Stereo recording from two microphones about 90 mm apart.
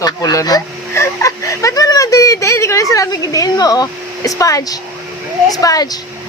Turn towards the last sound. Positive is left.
turn(degrees=45)  # may be behind; listen again after turning